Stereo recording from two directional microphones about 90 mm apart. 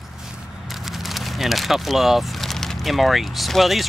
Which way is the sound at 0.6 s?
Centre (ahead or behind).